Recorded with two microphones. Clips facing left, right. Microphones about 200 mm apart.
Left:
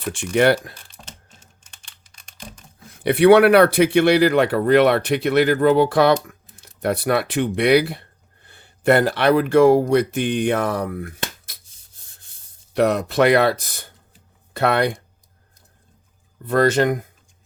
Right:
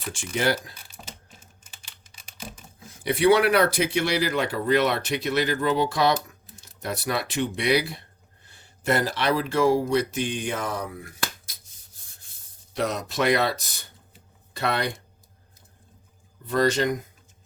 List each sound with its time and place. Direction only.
0.1 s speech: 60° left (ahead or behind)
0.8 s computer keyboard: 5° right (ahead or behind)
2.8 s speech: 60° left (ahead or behind)
12.7 s speech: 60° left (ahead or behind)
16.5 s speech: 55° left (ahead or behind)